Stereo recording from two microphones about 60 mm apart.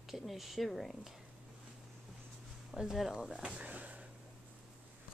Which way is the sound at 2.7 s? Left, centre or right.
Centre.